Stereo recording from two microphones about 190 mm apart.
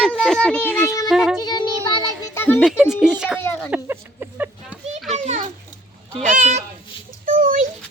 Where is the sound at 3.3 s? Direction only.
10° left (ahead or behind).